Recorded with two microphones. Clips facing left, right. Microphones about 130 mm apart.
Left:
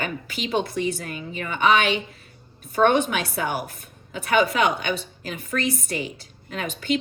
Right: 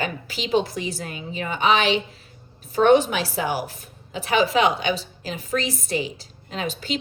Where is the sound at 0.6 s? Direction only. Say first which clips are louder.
Left 3 dB; 55° left (ahead or behind).